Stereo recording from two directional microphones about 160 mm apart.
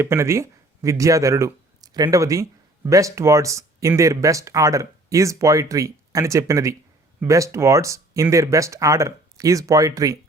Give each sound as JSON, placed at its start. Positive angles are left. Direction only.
{"t": 0.0, "sound": "speech", "side_deg": -15}